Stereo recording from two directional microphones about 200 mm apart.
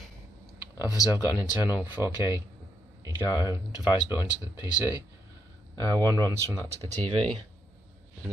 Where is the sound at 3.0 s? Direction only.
15° right (ahead or behind).